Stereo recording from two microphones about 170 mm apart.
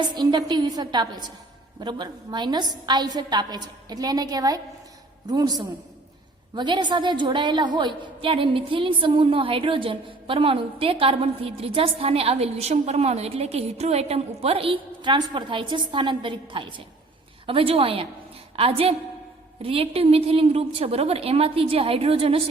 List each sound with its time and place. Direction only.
0.1 s a woman's voice: 25° right (ahead or behind)